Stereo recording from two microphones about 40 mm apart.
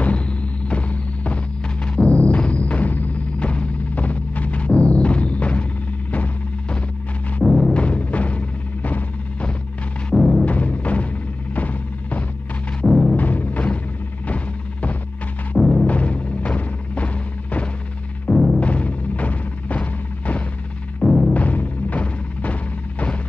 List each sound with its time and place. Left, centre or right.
0.0 s music: left
3.3 s music: left
7.4 s music: centre
7.7 s music: left
10.1 s music: centre
10.4 s music: left
14.2 s a sound: left
15.5 s music: centre
15.9 s music: left
18.3 s music: centre
18.6 s music: left
21.0 s music: centre
21.3 s music: left